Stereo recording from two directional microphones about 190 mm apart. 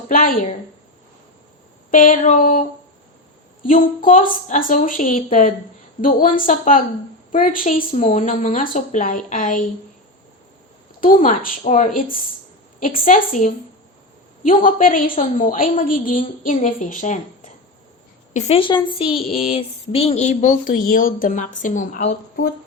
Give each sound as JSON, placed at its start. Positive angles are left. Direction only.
{"t": 0.1, "sound": "a woman's voice", "side_deg": 45}
{"t": 1.9, "sound": "a woman's voice", "side_deg": 45}
{"t": 3.7, "sound": "a woman's voice", "side_deg": 45}
{"t": 11.0, "sound": "a woman's voice", "side_deg": 45}
{"t": 18.3, "sound": "speech", "side_deg": 30}